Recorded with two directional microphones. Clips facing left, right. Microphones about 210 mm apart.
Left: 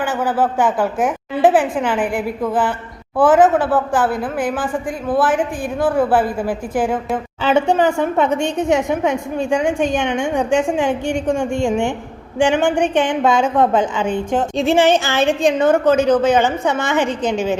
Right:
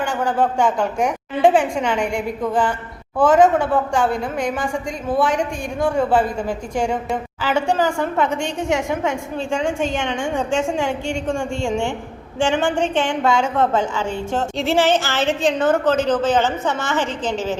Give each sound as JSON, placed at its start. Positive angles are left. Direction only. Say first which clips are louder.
{"t": 0.0, "sound": "a woman's voice", "louder": "left 1 dB", "side_deg": 5}
{"t": 7.4, "sound": "a woman's voice", "louder": "left 4 dB", "side_deg": 20}